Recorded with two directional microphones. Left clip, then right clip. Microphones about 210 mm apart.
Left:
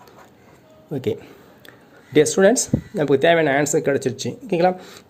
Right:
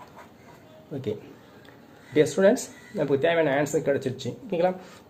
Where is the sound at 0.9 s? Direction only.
50° left (ahead or behind).